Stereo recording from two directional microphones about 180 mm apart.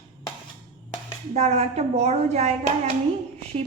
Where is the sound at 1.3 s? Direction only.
40° right (ahead or behind).